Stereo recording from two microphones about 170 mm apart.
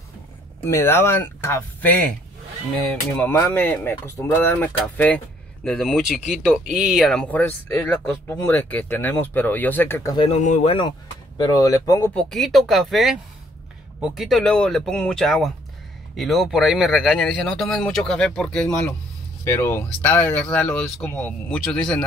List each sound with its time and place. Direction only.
0.7 s speech: 15° left (ahead or behind)
3.2 s speech: 10° left (ahead or behind)
10.1 s speech: 30° left (ahead or behind)
12.1 s speech: 5° left (ahead or behind)
19.4 s speech: 15° left (ahead or behind)